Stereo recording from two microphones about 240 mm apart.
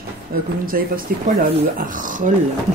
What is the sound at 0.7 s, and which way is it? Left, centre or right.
A woman's voice, right.